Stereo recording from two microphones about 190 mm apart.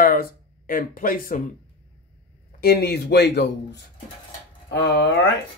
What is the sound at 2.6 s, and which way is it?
Speech, 60° left (ahead or behind).